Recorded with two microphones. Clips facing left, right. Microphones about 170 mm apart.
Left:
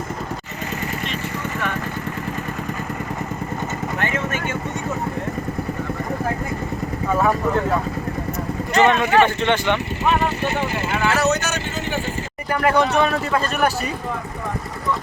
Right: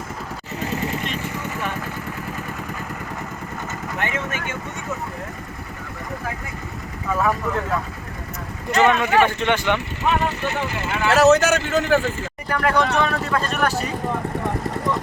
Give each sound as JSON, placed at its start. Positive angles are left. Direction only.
{"t": 4.0, "sound": "vehicle", "side_deg": -15}
{"t": 8.7, "sound": "speech", "side_deg": -5}
{"t": 11.1, "sound": "speech", "side_deg": -90}
{"t": 12.5, "sound": "speech", "side_deg": 5}